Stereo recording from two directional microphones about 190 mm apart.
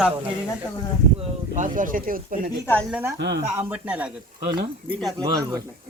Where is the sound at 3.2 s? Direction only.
65° right (ahead or behind).